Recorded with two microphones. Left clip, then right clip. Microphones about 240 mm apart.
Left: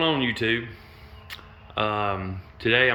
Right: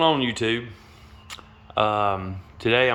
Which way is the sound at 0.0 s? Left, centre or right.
Centre.